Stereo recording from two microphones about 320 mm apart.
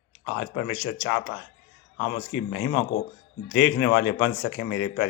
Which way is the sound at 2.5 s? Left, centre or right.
Left.